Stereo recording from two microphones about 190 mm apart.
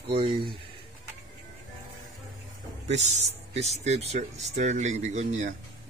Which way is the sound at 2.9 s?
35° right (ahead or behind).